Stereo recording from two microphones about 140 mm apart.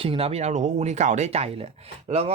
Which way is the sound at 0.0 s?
45° right (ahead or behind).